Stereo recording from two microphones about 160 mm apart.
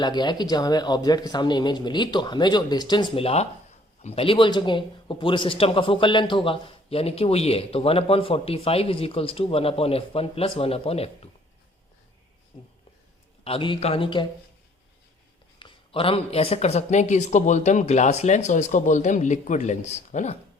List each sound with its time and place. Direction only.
0.0 s speech: 25° left (ahead or behind)
12.5 s speech: 40° left (ahead or behind)
15.5 s speech: 30° left (ahead or behind)